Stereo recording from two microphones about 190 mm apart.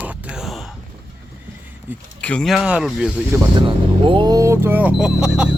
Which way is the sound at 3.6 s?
25° right (ahead or behind).